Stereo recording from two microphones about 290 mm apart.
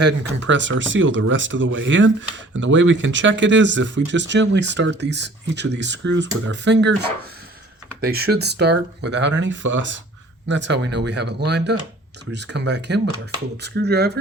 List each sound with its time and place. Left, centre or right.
0.0 s speech: right
8.0 s speech: right